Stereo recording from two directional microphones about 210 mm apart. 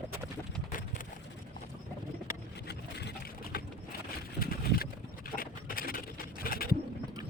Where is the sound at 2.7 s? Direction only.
50° left (ahead or behind).